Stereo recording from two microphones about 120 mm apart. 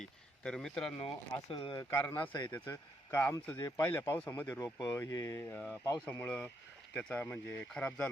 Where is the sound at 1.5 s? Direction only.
45° left (ahead or behind).